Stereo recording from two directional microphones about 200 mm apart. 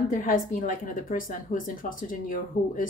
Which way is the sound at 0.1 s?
45° left (ahead or behind).